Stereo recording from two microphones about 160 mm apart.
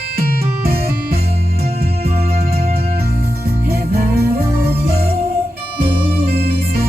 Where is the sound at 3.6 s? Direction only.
75° right (ahead or behind).